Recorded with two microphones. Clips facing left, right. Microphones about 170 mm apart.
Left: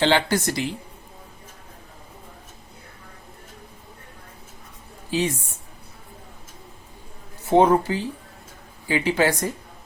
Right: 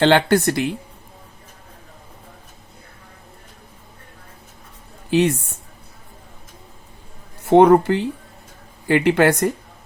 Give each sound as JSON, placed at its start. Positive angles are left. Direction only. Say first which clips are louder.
{"t": 0.0, "sound": "speech", "louder": "right 5 dB", "side_deg": -60}
{"t": 5.1, "sound": "speech", "louder": "right 7 dB", "side_deg": -65}
{"t": 7.4, "sound": "speech", "louder": "right 5 dB", "side_deg": -65}